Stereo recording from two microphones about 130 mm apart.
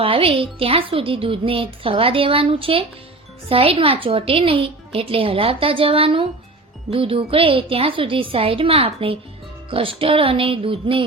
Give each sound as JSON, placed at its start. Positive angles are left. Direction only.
{"t": 0.0, "sound": "speech", "side_deg": -45}